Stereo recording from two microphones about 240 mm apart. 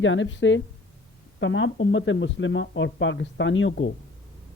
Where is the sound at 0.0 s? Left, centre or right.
Left.